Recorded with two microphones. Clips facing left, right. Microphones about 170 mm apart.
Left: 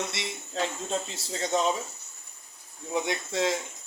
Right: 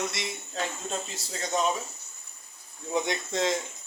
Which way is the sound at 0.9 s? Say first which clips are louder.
Left 3 dB; 25° left (ahead or behind).